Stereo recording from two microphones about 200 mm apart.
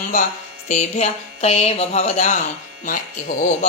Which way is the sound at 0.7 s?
35° left (ahead or behind).